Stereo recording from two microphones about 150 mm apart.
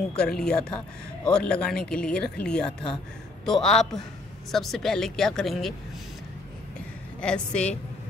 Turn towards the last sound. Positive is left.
turn(degrees=5)  # may be behind; listen again after turning